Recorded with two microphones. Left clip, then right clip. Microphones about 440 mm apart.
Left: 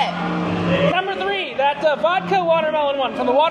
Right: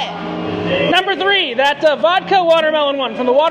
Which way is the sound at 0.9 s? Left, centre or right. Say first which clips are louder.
Right 7 dB; right.